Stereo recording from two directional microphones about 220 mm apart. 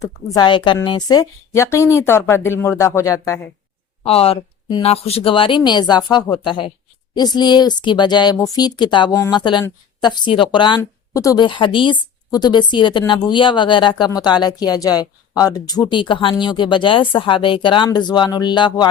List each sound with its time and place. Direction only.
0.3 s a woman's voice: 20° left (ahead or behind)
4.0 s a woman's voice: 25° left (ahead or behind)